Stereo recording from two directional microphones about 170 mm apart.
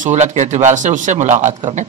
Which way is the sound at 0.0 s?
45° right (ahead or behind).